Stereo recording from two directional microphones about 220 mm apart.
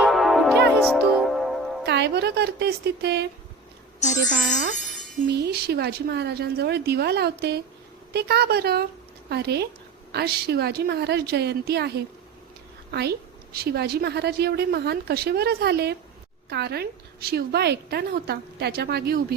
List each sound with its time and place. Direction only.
0.0 s music: centre (ahead or behind)
1.8 s a woman's voice: 50° right (ahead or behind)